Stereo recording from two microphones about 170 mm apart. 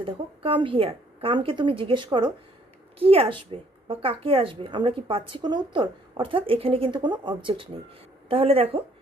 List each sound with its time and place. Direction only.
0.0 s a woman's voice: 30° right (ahead or behind)